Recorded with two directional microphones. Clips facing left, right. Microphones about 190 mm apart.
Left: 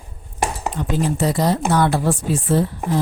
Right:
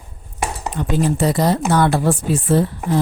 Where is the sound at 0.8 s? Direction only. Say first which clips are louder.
Right 3 dB; 60° right (ahead or behind).